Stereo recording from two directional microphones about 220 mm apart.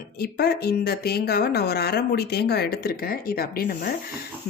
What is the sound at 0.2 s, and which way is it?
A woman's voice, 45° left (ahead or behind).